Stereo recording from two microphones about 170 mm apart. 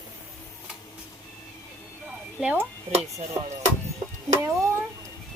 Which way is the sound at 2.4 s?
10° right (ahead or behind).